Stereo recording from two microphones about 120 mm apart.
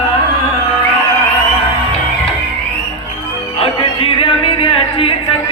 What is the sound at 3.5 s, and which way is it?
Music, 50° left (ahead or behind).